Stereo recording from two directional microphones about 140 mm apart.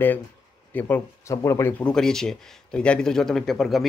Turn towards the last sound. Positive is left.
turn(degrees=0)  # may be behind; listen again after turning